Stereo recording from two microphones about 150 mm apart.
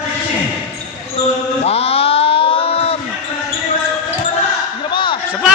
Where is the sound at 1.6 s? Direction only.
40° left (ahead or behind).